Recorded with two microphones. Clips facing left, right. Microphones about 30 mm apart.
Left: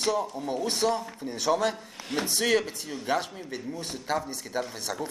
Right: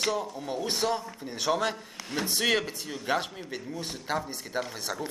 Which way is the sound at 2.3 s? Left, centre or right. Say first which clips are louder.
Left 1 dB; centre.